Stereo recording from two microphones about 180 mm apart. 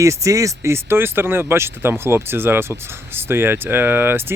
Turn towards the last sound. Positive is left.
turn(degrees=-10)  # may be behind; listen again after turning